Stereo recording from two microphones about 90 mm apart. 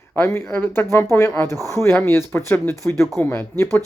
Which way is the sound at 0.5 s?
20° left (ahead or behind).